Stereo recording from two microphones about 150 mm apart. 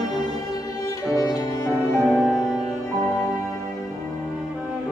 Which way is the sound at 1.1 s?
25° left (ahead or behind).